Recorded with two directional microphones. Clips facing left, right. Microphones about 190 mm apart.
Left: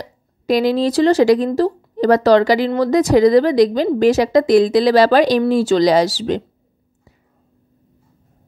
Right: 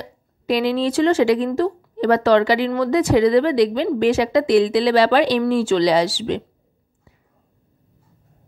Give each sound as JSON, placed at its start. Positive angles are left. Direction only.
{"t": 0.0, "sound": "speech", "side_deg": 40}